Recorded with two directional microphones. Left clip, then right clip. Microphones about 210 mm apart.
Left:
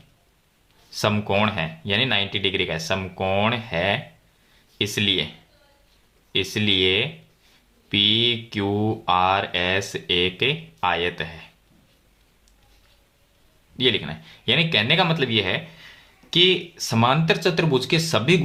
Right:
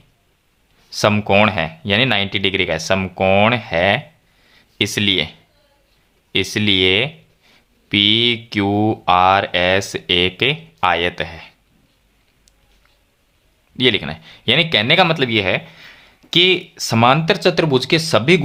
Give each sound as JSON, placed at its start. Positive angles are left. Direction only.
{"t": 0.9, "sound": "speech", "side_deg": -35}
{"t": 6.3, "sound": "speech", "side_deg": -35}
{"t": 13.7, "sound": "speech", "side_deg": -35}